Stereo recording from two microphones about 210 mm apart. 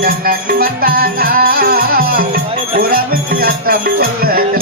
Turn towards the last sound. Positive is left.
turn(degrees=-45)  # may be behind; listen again after turning